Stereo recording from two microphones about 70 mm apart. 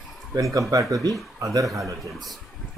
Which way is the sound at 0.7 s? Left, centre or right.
Right.